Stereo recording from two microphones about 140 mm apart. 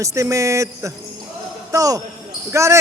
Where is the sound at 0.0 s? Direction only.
20° right (ahead or behind).